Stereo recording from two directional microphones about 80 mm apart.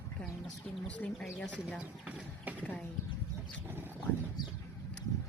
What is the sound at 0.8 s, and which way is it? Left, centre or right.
Speech, centre.